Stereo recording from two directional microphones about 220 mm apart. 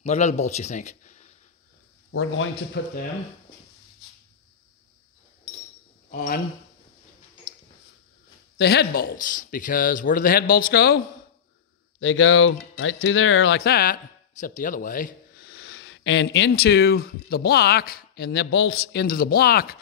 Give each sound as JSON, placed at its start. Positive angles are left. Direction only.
{"t": 0.0, "sound": "a man's voice", "side_deg": 30}
{"t": 2.1, "sound": "speech", "side_deg": 60}
{"t": 6.0, "sound": "speech", "side_deg": 40}
{"t": 8.5, "sound": "speech", "side_deg": 50}
{"t": 12.0, "sound": "speech", "side_deg": 60}
{"t": 13.6, "sound": "speech", "side_deg": 45}
{"t": 15.5, "sound": "speech", "side_deg": 65}